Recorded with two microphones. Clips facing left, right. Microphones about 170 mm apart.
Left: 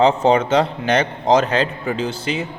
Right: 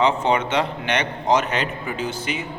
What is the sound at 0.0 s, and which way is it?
Speech, 40° left (ahead or behind).